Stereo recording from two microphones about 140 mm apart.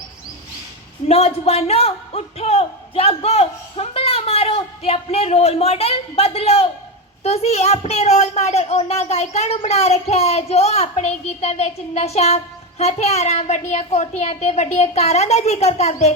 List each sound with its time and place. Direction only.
1.0 s a man's voice: 45° left (ahead or behind)